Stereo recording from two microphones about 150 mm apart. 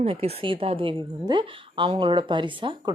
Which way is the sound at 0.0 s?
40° right (ahead or behind).